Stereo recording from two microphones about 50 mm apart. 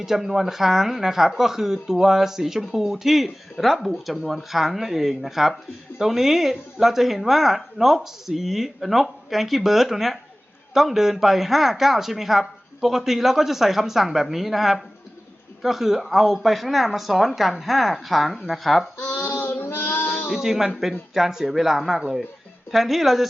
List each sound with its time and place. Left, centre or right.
0.0 s speech: centre
19.4 s female singing: left
20.2 s speech: centre